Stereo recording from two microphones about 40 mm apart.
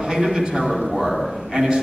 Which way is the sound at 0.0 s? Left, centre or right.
Centre.